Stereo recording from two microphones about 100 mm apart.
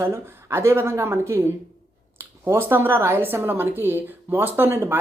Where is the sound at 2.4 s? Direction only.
25° right (ahead or behind).